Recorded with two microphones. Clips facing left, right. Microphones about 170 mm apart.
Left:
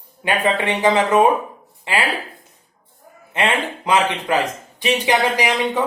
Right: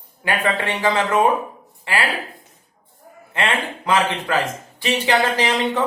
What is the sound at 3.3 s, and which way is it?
Speech, 20° left (ahead or behind).